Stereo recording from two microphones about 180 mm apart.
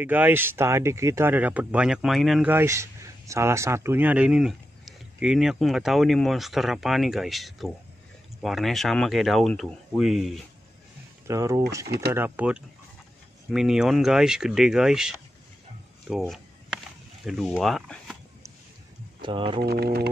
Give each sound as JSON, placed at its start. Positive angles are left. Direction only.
{"t": 0.0, "sound": "speech", "side_deg": -10}
{"t": 2.5, "sound": "speech", "side_deg": -15}
{"t": 11.2, "sound": "speech", "side_deg": -15}
{"t": 11.8, "sound": "speech", "side_deg": -65}
{"t": 12.1, "sound": "speech", "side_deg": -10}
{"t": 16.1, "sound": "a sound", "side_deg": -5}
{"t": 19.2, "sound": "speech", "side_deg": -30}
{"t": 19.6, "sound": "speech", "side_deg": -60}